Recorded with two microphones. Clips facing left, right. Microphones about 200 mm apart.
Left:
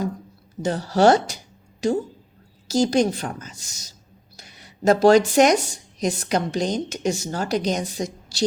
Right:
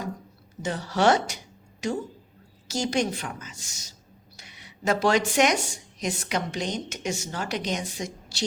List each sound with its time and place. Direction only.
0.6 s a woman's voice: 35° left (ahead or behind)